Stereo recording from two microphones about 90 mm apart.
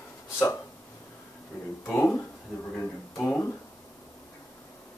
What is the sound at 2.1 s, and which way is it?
Speech, 20° left (ahead or behind).